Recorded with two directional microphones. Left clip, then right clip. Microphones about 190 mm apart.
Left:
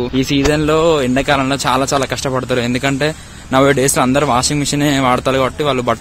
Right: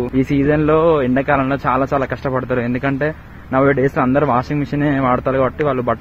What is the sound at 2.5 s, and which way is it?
Speech, 30° left (ahead or behind).